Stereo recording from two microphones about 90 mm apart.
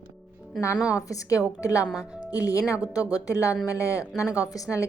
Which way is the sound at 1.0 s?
40° left (ahead or behind).